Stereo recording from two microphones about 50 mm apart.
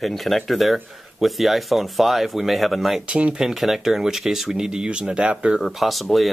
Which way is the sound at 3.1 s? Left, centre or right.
Right.